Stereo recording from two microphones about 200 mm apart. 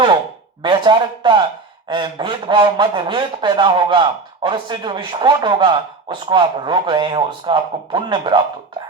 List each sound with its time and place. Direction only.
0.6 s speech: 25° right (ahead or behind)